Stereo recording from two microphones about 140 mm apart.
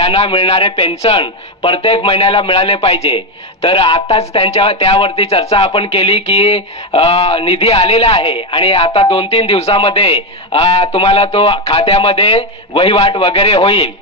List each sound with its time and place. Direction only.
0.0 s a man's voice: 45° left (ahead or behind)